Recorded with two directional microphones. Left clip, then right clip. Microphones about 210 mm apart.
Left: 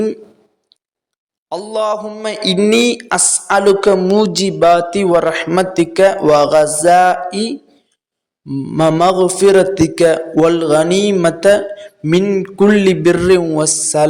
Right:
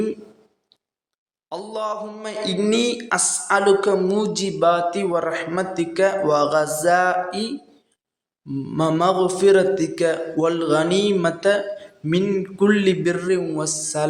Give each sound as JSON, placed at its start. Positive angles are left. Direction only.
{"t": 1.5, "sound": "a man's voice", "side_deg": 35}